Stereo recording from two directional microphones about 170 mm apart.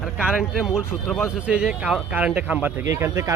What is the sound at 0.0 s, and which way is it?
Speech, 5° right (ahead or behind).